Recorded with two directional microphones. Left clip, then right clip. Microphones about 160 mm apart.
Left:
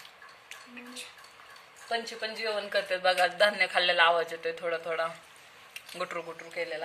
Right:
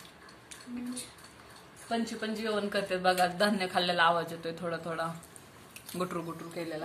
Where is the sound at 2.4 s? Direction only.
25° left (ahead or behind).